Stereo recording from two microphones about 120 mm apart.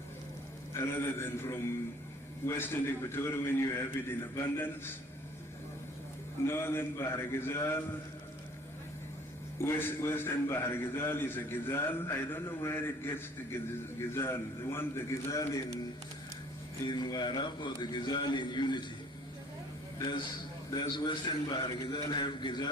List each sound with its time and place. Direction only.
0.7 s a man's voice: 20° left (ahead or behind)
6.4 s a man's voice: 20° left (ahead or behind)
9.6 s a man's voice: 20° left (ahead or behind)
16.8 s a man's voice: 35° left (ahead or behind)
20.7 s a man's voice: 35° left (ahead or behind)